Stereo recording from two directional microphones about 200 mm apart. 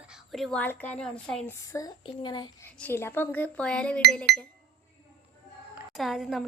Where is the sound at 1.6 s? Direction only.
15° left (ahead or behind).